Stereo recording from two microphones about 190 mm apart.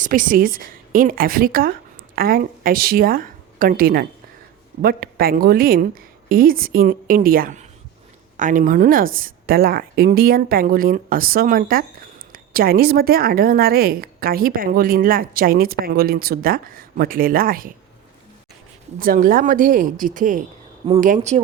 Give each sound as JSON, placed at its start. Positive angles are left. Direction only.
{"t": 0.0, "sound": "a woman's voice", "side_deg": -45}
{"t": 18.9, "sound": "a woman's voice", "side_deg": -45}